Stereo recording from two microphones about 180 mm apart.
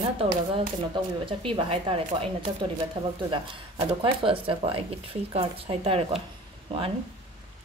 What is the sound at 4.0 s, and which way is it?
Speech, 30° right (ahead or behind).